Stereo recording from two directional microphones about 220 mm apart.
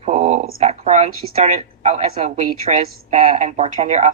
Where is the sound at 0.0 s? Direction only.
30° right (ahead or behind).